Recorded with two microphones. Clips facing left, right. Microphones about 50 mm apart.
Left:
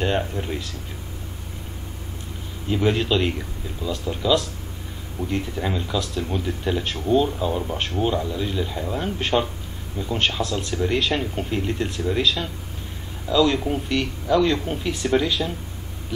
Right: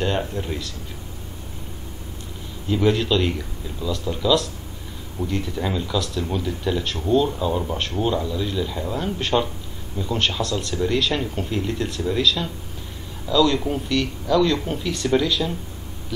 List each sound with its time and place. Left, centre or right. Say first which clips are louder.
0.0 s speech: even; centre
2.7 s speech: right 1 dB; centre
8.3 s speech: right 1 dB; centre